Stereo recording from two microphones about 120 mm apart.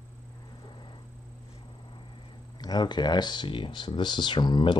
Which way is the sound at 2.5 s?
35° left (ahead or behind).